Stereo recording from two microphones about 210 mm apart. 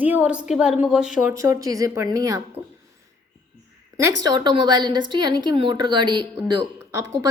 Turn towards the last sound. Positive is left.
turn(degrees=-15)  # may be behind; listen again after turning